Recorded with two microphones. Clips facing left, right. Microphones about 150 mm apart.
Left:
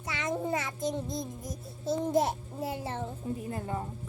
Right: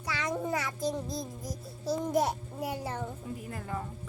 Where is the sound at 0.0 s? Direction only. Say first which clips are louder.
Even; 25° left (ahead or behind).